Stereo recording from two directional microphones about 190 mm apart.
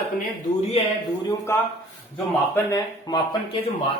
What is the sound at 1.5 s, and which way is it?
A man's voice, 15° left (ahead or behind).